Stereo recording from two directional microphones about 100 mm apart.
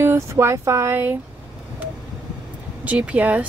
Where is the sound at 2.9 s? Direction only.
15° right (ahead or behind).